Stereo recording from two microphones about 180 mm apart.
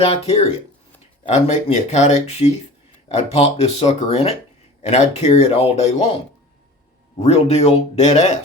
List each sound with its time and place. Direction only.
0.0 s speech: 35° left (ahead or behind)
7.2 s speech: 35° left (ahead or behind)